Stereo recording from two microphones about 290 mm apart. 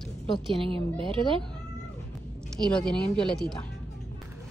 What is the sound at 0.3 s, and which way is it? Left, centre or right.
Speech, centre.